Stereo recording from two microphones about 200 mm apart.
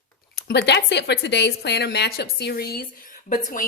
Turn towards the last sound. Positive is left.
turn(degrees=45)  # may be behind; listen again after turning